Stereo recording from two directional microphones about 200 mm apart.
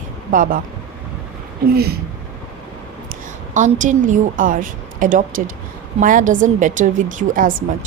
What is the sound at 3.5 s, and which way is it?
A woman's voice, 40° right (ahead or behind).